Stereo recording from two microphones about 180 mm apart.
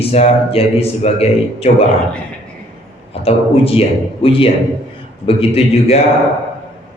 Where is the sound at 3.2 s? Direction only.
30° left (ahead or behind).